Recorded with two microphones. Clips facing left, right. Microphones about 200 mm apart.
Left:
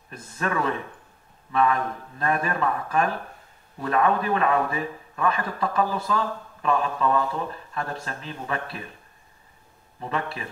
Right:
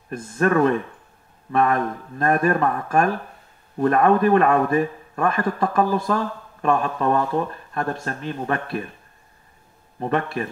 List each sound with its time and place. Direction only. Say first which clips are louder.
0.1 s a man's voice: right 9 dB; 50° right (ahead or behind)
9.9 s a man's voice: right 7 dB; 50° right (ahead or behind)